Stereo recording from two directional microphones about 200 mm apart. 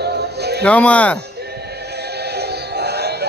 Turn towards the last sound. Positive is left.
turn(degrees=-55)  # may be behind; listen again after turning